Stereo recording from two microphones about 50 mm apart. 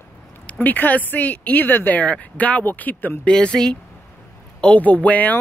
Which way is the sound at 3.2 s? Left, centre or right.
Centre.